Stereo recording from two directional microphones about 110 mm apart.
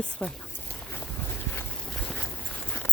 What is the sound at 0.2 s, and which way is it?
Speech, 10° left (ahead or behind).